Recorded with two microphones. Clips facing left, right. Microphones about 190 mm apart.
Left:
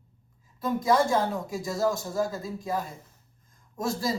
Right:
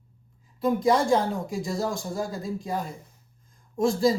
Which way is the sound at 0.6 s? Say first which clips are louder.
Right 2 dB; 25° right (ahead or behind).